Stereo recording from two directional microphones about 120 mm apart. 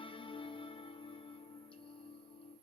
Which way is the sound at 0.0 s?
45° left (ahead or behind).